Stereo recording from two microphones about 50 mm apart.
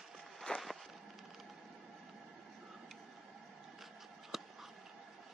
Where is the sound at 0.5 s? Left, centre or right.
Centre.